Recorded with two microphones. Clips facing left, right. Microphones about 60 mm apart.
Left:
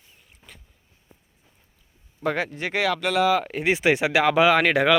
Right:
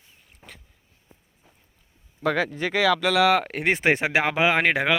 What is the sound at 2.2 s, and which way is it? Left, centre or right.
Speech, right.